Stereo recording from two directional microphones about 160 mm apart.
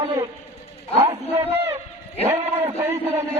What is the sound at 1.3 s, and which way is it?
A man's voice, 15° right (ahead or behind).